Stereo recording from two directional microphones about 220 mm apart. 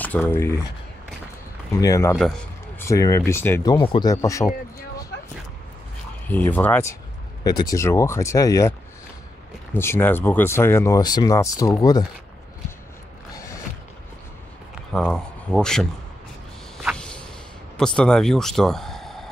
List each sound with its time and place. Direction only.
0.0 s speech: 10° left (ahead or behind)
1.8 s speech: 15° left (ahead or behind)
2.1 s a sound: 5° left (ahead or behind)
2.9 s speech: 15° left (ahead or behind)
6.2 s speech: 10° left (ahead or behind)
9.8 s speech: 10° left (ahead or behind)
14.9 s speech: 5° left (ahead or behind)
16.7 s a sound: centre (ahead or behind)
17.7 s speech: 5° left (ahead or behind)